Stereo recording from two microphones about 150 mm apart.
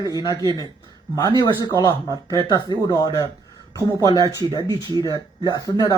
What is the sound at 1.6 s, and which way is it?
Speech, 25° left (ahead or behind).